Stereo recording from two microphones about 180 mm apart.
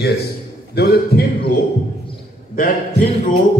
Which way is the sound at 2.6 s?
50° left (ahead or behind).